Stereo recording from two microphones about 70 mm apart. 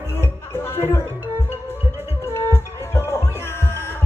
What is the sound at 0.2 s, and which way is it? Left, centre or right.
Music, left.